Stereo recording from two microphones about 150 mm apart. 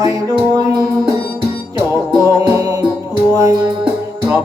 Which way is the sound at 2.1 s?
20° right (ahead or behind).